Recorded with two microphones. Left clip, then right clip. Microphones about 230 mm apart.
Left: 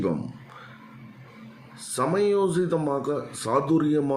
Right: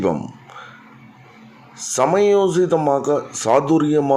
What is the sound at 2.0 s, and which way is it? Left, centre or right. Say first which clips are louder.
Speech: right 8 dB; centre.